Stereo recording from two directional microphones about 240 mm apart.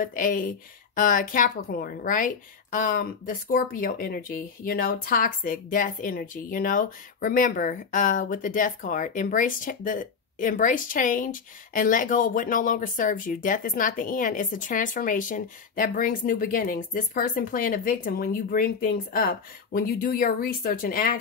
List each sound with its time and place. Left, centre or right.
0.0 s speech: left